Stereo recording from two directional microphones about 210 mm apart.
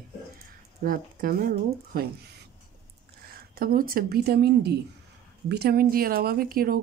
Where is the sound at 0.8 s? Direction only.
45° right (ahead or behind).